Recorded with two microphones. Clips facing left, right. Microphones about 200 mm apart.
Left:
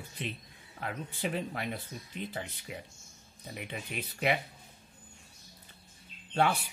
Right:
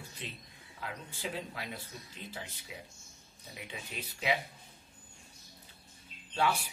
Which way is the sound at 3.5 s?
60° left (ahead or behind).